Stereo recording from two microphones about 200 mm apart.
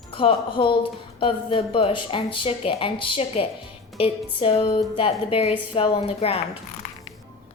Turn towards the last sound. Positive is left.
turn(degrees=30)  # may be behind; listen again after turning